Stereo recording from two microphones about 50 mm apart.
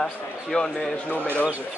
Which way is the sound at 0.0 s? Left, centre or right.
Centre.